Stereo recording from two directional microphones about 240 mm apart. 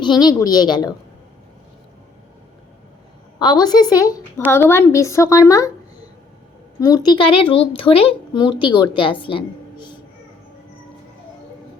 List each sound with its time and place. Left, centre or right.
0.0 s a woman's voice: centre
3.3 s a woman's voice: centre
6.7 s a woman's voice: centre
9.0 s a sound: left